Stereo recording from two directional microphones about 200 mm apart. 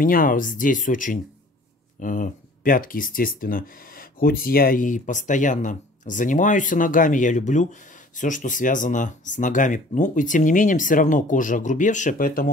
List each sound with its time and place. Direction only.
0.0 s speech: 45° left (ahead or behind)